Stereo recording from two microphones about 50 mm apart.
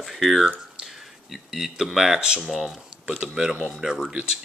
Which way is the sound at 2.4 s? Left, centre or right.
Centre.